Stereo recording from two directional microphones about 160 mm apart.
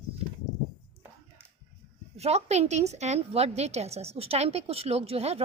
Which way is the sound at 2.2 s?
40° right (ahead or behind).